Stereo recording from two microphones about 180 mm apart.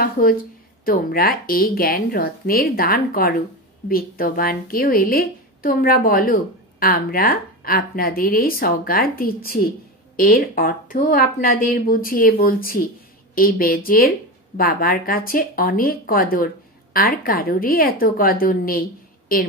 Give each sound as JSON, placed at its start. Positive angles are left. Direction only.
{"t": 0.0, "sound": "a woman's voice", "side_deg": 55}